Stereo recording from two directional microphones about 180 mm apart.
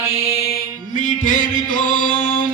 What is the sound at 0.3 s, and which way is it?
Music, 60° left (ahead or behind).